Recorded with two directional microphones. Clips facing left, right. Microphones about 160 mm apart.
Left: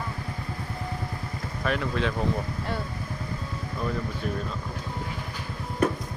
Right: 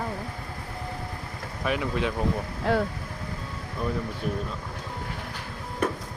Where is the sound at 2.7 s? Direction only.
90° right.